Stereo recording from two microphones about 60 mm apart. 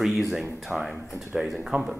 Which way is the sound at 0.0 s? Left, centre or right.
Centre.